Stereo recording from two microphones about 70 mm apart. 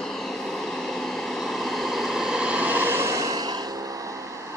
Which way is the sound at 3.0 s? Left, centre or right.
Right.